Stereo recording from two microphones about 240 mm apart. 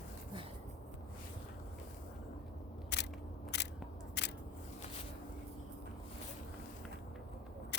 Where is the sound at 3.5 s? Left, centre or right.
Left.